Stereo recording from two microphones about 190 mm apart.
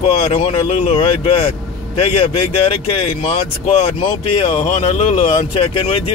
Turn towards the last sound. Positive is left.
turn(degrees=30)  # may be behind; listen again after turning